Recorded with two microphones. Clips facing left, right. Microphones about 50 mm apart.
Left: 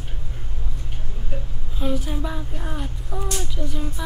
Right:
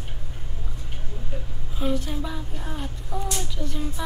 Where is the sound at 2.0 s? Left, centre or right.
Centre.